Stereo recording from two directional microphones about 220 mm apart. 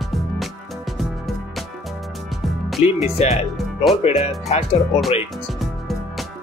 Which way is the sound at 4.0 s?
30° left (ahead or behind).